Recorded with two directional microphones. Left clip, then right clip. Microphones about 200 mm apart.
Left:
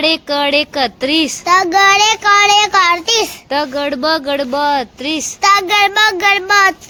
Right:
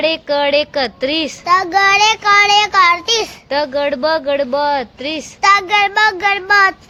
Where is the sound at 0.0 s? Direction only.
15° left (ahead or behind).